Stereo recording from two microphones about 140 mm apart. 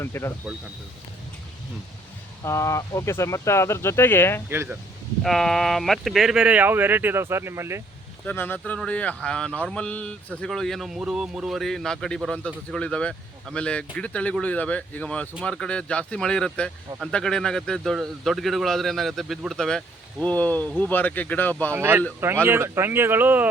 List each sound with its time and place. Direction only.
0.0 s speech: 20° left (ahead or behind)
2.4 s speech: 20° left (ahead or behind)
4.4 s speech: 15° right (ahead or behind)
5.2 s speech: centre (ahead or behind); by 7.8 s 20° right (ahead or behind)
8.3 s speech: 15° left (ahead or behind)
21.8 s speech: 15° right (ahead or behind)